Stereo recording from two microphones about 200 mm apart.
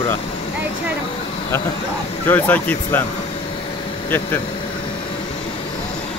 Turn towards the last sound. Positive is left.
turn(degrees=10)  # may be behind; listen again after turning